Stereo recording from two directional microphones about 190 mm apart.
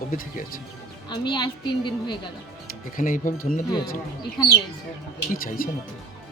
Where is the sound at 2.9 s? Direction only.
45° left (ahead or behind).